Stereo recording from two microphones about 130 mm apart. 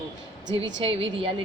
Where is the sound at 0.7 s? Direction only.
45° right (ahead or behind).